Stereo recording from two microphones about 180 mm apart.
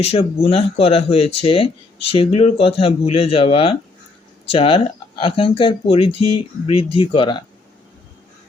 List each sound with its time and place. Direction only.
0.0 s speech: 30° left (ahead or behind)